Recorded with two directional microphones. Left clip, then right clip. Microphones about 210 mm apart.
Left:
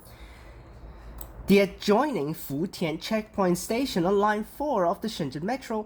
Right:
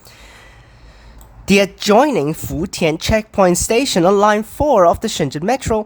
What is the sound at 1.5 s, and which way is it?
Speech, 30° right (ahead or behind).